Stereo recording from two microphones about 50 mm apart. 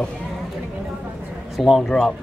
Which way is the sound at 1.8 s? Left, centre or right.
Centre.